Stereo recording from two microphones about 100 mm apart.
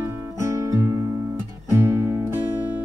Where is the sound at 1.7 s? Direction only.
30° right (ahead or behind).